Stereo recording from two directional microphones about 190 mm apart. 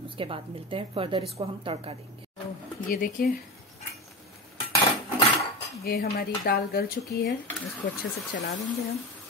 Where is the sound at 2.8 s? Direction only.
45° left (ahead or behind).